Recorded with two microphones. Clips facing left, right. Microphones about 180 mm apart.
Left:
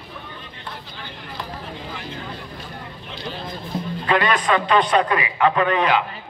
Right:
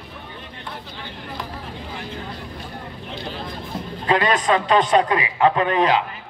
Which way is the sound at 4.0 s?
30° right (ahead or behind).